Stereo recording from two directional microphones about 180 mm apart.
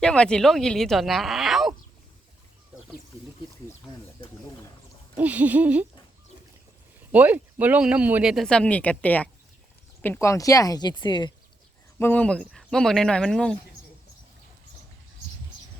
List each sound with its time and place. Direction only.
0.0 s speech: 5° left (ahead or behind)
5.1 s a sound: 10° right (ahead or behind)
7.1 s speech: 10° right (ahead or behind); by 11.3 s 25° left (ahead or behind)
11.9 s speech: 10° left (ahead or behind)